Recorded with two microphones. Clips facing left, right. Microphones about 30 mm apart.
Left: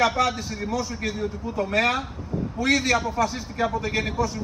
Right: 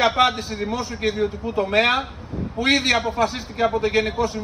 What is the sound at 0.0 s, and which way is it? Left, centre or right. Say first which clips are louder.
A man's voice: right 4 dB; right.